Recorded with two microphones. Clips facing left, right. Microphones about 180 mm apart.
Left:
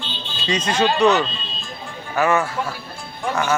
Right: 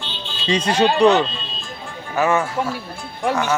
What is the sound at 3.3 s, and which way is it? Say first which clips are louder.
Speech: even; centre (ahead or behind).